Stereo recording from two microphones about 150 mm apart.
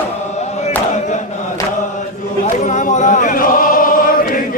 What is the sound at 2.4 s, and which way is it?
Choir, 50° left (ahead or behind).